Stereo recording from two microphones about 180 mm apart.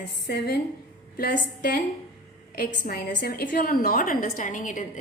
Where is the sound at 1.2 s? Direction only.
55° left (ahead or behind).